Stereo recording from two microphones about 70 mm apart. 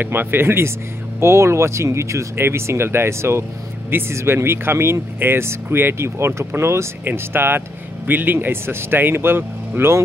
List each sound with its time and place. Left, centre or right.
0.0 s speech: right